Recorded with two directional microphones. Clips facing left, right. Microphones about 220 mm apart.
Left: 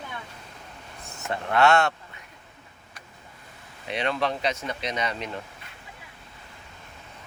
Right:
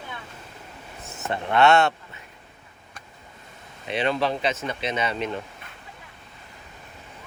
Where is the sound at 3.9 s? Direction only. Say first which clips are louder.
Right 3 dB; 30° right (ahead or behind).